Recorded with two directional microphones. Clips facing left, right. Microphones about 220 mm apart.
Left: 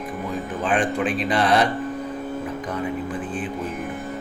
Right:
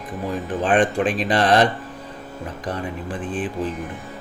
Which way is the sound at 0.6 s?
30° right (ahead or behind).